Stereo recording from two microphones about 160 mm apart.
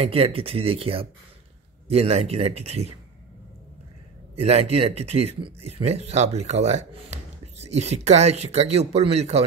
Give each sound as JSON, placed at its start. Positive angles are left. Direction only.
{"t": 0.0, "sound": "speech", "side_deg": -35}
{"t": 4.4, "sound": "speech", "side_deg": -40}